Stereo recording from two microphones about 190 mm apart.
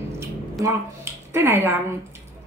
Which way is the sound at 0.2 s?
15° right (ahead or behind).